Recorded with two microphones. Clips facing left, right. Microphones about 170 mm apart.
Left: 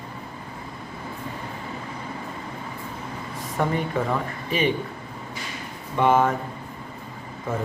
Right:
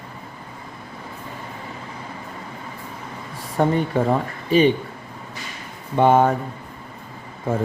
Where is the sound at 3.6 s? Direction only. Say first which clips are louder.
Right 5 dB; 30° right (ahead or behind).